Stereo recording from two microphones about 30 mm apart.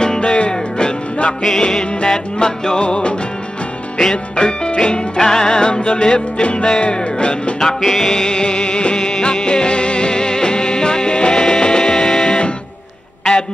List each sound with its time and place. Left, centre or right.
0.0 s music: left
1.6 s music: left
2.8 s music: left
4.0 s music: left
7.6 s music: centre